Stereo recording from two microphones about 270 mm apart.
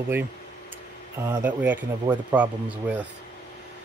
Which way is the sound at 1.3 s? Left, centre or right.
Centre.